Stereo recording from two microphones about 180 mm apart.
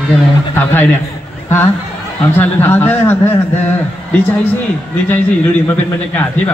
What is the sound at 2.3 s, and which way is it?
Speech, 10° left (ahead or behind).